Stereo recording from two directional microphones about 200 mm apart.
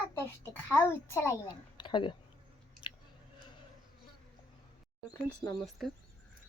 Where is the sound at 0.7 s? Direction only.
10° left (ahead or behind).